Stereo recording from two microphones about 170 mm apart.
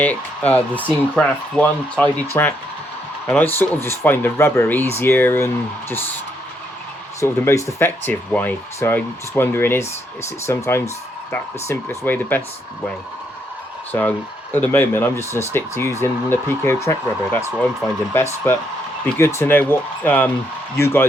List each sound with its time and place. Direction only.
0.0 s speech: 10° left (ahead or behind)
2.3 s speech: 15° left (ahead or behind)
7.2 s speech: 15° left (ahead or behind)
13.9 s speech: 15° left (ahead or behind)